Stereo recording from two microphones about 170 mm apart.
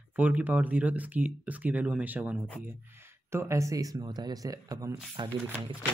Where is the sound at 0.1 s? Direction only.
10° right (ahead or behind); by 5.8 s 30° right (ahead or behind).